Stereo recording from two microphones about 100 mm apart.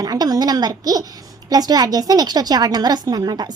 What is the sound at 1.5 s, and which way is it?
A woman's voice, 40° right (ahead or behind).